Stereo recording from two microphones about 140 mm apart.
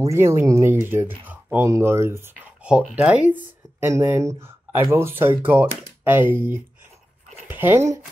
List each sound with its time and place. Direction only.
0.0 s speech: 20° right (ahead or behind)
2.6 s speech: 10° right (ahead or behind)